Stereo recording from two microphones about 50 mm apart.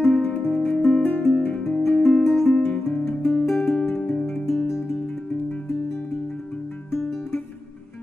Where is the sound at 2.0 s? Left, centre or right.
Centre.